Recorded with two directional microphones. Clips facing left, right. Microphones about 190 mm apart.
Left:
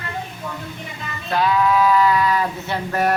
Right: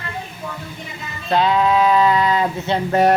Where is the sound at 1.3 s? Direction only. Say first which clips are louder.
Right 2 dB; 25° right (ahead or behind).